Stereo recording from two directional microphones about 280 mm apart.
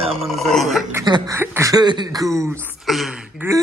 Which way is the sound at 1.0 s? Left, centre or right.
Centre.